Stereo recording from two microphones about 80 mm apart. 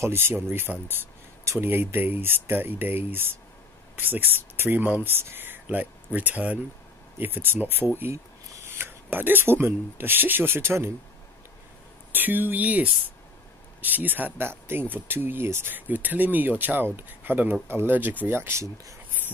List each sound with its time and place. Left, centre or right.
0.0 s speech: right
8.6 s speech: right
12.1 s speech: right